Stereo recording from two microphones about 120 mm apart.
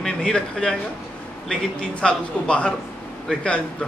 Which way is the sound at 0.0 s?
5° left (ahead or behind).